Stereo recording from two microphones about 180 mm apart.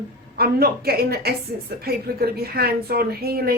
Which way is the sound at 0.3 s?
60° right (ahead or behind).